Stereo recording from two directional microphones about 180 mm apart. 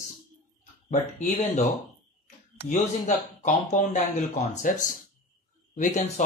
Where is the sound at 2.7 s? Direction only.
40° left (ahead or behind).